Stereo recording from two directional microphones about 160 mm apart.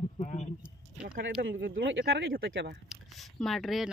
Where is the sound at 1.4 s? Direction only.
75° right (ahead or behind).